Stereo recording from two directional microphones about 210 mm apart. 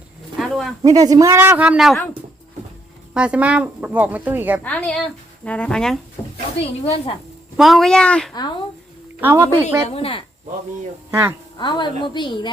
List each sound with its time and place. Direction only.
0.3 s a sound: centre (ahead or behind)
0.8 s speech: 15° right (ahead or behind); by 2.0 s centre (ahead or behind)
3.2 s speech: 5° right (ahead or behind)
4.6 s speech: 5° left (ahead or behind)
6.6 s a woman's voice: 30° left (ahead or behind)
7.5 s speech: centre (ahead or behind)
9.2 s speech: 10° right (ahead or behind)
9.9 s a woman's voice: 25° left (ahead or behind)
11.1 s a woman's voice: 10° right (ahead or behind)
11.5 s a woman's voice: 20° left (ahead or behind)